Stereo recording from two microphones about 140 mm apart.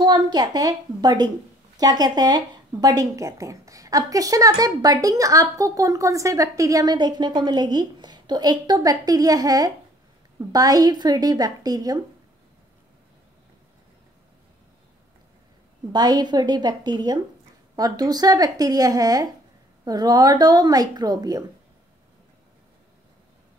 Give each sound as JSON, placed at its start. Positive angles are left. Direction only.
{"t": 0.0, "sound": "speech", "side_deg": -30}
{"t": 15.9, "sound": "speech", "side_deg": -30}